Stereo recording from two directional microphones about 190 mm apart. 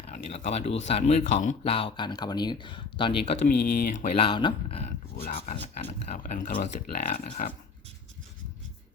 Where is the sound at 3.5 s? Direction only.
60° left (ahead or behind).